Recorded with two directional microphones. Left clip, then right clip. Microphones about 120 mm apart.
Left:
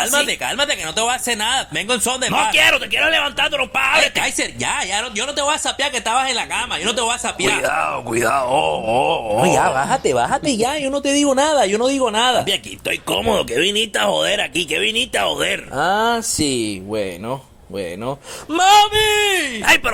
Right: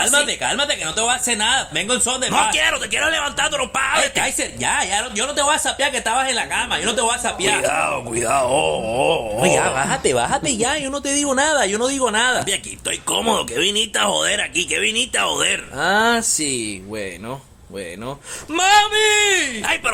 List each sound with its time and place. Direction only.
0.3 s speech: 55° left (ahead or behind)
2.5 s a man's voice: 35° left (ahead or behind)
2.7 s speech: 20° left (ahead or behind)
18.5 s speech: 25° left (ahead or behind)